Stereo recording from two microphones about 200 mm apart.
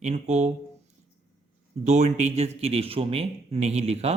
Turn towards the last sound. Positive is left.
turn(degrees=-30)  # may be behind; listen again after turning